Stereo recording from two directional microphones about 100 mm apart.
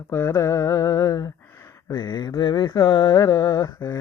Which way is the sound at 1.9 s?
50° left (ahead or behind).